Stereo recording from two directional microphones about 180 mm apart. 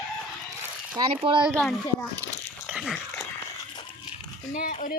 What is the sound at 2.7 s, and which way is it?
Dog, centre (ahead or behind).